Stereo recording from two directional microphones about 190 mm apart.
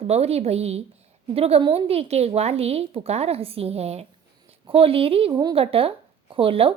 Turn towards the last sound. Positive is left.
turn(degrees=-30)  # may be behind; listen again after turning